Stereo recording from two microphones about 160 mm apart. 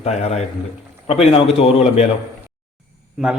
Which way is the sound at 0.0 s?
40° left (ahead or behind).